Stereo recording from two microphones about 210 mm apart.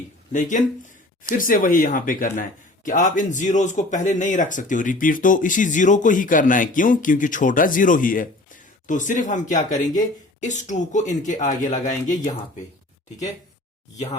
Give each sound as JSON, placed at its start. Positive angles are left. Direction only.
{"t": 0.3, "sound": "a man's voice", "side_deg": 35}
{"t": 13.9, "sound": "a man's voice", "side_deg": 35}